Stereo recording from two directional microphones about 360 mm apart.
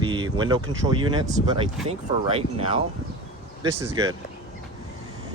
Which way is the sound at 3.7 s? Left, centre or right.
Right.